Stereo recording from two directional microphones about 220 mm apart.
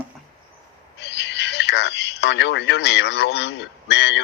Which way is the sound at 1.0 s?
50° left (ahead or behind).